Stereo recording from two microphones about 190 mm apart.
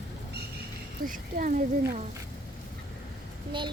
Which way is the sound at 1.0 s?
45° right (ahead or behind).